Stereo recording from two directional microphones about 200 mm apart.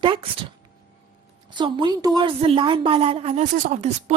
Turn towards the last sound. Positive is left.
turn(degrees=-35)  # may be behind; listen again after turning